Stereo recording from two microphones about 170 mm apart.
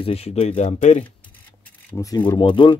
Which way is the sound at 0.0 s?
35° left (ahead or behind).